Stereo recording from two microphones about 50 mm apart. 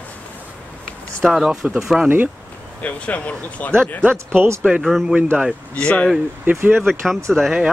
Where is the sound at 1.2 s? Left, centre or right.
Centre.